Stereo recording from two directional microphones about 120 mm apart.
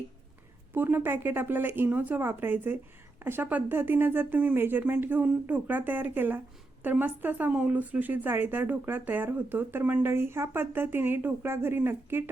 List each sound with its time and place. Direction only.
0.7 s speech: 15° right (ahead or behind)